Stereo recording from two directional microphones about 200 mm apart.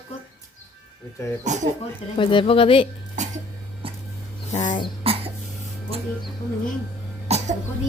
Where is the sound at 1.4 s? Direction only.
35° right (ahead or behind).